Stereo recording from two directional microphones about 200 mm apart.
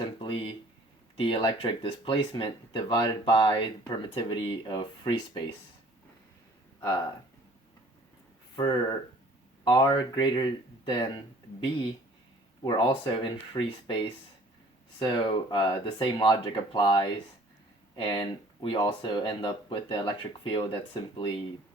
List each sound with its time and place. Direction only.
0.2 s a sound: 25° left (ahead or behind)
1.1 s speech: 25° left (ahead or behind)
8.5 s speech: 25° left (ahead or behind)
12.6 s speech: 25° left (ahead or behind)